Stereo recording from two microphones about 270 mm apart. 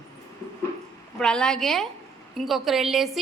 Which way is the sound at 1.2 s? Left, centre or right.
Centre.